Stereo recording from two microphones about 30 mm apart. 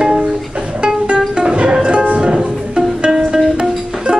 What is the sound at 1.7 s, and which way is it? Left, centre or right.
Music, right.